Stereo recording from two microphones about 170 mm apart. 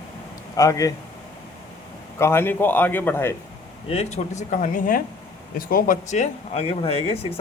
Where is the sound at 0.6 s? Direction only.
20° left (ahead or behind).